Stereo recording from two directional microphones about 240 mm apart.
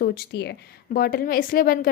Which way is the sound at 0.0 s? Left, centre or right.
Left.